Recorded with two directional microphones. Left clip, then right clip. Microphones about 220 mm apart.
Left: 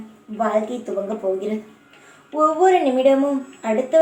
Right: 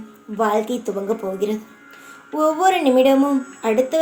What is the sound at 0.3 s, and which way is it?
Speech, 50° right (ahead or behind).